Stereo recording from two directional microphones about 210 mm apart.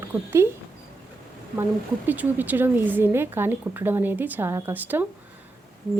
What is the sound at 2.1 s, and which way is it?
Speech, 10° right (ahead or behind).